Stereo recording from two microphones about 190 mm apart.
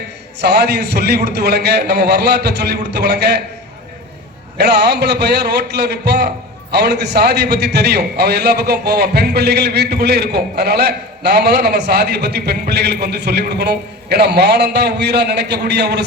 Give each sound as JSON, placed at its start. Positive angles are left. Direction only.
{"t": 0.4, "sound": "a man's voice", "side_deg": -60}
{"t": 4.5, "sound": "a man's voice", "side_deg": -60}